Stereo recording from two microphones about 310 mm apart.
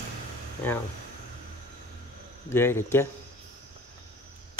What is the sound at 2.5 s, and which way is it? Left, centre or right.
Speech, centre.